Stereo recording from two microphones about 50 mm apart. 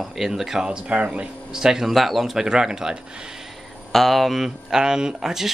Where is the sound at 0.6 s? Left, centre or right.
Centre.